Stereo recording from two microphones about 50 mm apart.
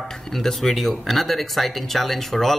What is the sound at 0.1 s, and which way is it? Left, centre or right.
Speech, centre.